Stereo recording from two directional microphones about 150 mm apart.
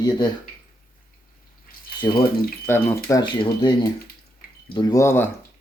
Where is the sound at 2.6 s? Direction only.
15° left (ahead or behind).